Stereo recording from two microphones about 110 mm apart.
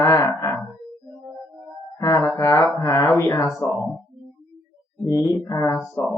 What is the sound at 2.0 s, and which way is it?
Music, 30° left (ahead or behind).